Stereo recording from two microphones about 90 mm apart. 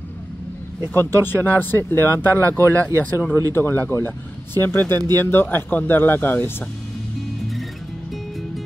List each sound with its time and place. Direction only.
1.2 s speech: 20° left (ahead or behind)